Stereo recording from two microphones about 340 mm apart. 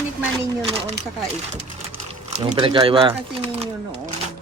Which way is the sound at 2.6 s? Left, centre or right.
Centre.